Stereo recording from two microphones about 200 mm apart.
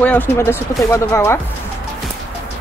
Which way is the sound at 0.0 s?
10° left (ahead or behind).